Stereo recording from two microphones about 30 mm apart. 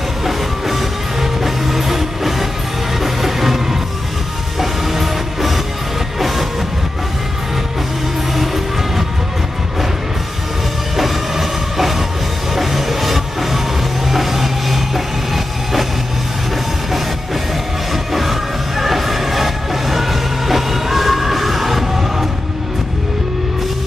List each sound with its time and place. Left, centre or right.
0.2 s music: centre
11.0 s train: centre
12.5 s music: centre
18.1 s music: centre